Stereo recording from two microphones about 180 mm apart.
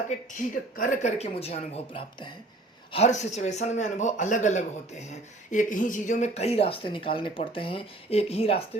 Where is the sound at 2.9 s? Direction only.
40° left (ahead or behind).